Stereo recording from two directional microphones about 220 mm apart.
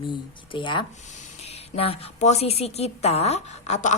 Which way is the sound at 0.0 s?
20° left (ahead or behind).